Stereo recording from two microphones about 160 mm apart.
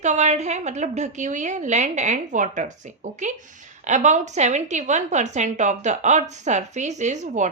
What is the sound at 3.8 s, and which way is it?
Speech, 50° right (ahead or behind).